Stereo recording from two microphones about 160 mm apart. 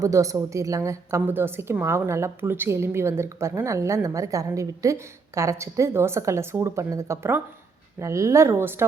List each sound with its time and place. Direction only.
0.0 s a woman's voice: 20° right (ahead or behind)